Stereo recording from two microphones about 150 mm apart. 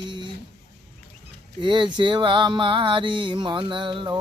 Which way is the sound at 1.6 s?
30° right (ahead or behind).